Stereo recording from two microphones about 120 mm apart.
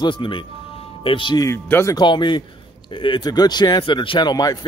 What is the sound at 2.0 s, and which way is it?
Speech, 40° left (ahead or behind).